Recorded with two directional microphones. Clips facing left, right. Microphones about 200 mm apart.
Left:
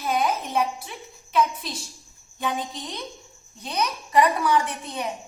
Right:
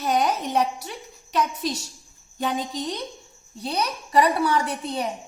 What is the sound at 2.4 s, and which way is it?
A woman's voice, 35° right (ahead or behind).